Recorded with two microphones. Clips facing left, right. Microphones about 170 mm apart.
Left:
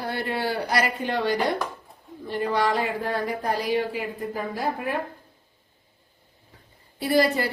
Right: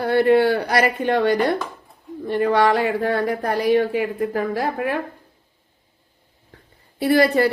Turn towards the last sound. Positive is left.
turn(degrees=-60)  # may be behind; listen again after turning